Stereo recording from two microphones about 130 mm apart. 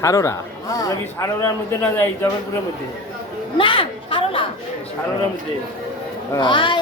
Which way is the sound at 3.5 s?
40° left (ahead or behind).